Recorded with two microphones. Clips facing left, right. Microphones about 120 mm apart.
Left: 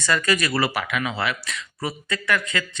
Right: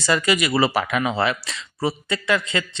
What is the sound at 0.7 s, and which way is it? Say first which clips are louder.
Speech: right 5 dB; 35° right (ahead or behind).